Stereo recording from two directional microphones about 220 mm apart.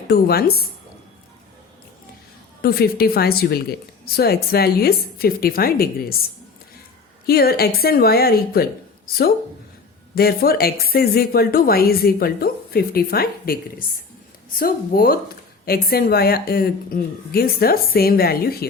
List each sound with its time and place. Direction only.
0.1 s speech: 45° left (ahead or behind)
2.6 s speech: 45° left (ahead or behind)
7.3 s speech: 45° left (ahead or behind)
10.2 s speech: 45° left (ahead or behind)